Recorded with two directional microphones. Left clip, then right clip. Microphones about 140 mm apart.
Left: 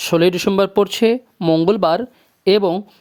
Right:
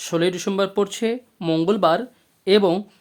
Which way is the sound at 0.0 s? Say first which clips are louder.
Left 7 dB; 45° left (ahead or behind).